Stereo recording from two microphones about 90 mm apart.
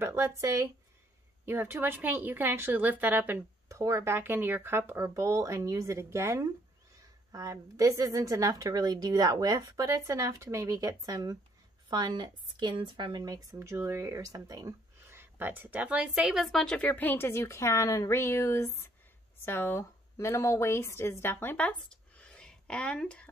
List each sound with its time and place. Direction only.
0.0 s speech: 30° right (ahead or behind)
3.6 s speech: 35° right (ahead or behind)
7.7 s speech: 40° right (ahead or behind)
9.8 s speech: 35° right (ahead or behind)
15.0 s speech: 25° right (ahead or behind); by 21.6 s 25° left (ahead or behind)
21.6 s a sound: 15° left (ahead or behind)